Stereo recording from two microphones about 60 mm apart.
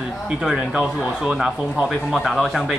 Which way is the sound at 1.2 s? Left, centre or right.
Centre.